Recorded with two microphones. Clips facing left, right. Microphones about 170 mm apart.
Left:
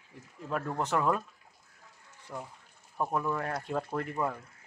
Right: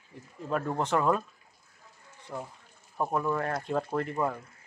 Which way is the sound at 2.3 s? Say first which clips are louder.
Right 3 dB; 5° right (ahead or behind).